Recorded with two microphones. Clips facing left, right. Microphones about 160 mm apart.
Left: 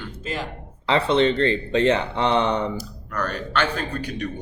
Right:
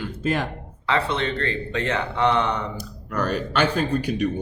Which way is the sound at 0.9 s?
20° left (ahead or behind).